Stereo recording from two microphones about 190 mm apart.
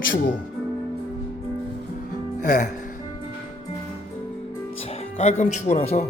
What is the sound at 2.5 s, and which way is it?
Speech, 40° left (ahead or behind).